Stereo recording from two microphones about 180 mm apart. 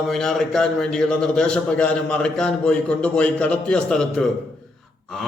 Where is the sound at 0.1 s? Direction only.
Centre (ahead or behind).